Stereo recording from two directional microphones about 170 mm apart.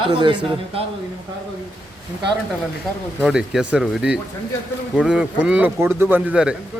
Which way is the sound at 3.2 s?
5° right (ahead or behind).